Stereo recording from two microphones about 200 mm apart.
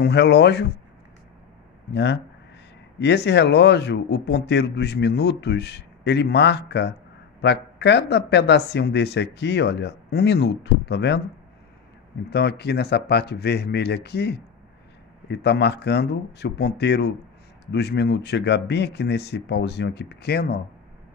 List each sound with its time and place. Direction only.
0.0 s speech: 55° left (ahead or behind)
1.9 s speech: 55° left (ahead or behind)
12.3 s speech: 55° left (ahead or behind)